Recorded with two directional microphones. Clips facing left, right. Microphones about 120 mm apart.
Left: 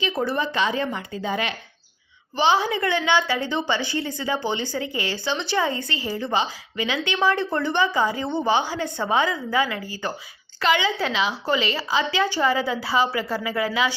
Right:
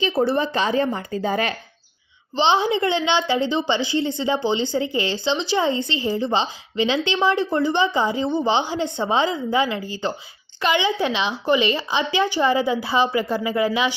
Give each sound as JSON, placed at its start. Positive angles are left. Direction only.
{"t": 0.0, "sound": "speech", "side_deg": -30}
{"t": 2.3, "sound": "a woman's voice", "side_deg": -25}